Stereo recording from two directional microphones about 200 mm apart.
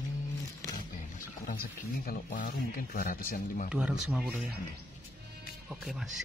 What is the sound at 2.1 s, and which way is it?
Speech, 45° left (ahead or behind).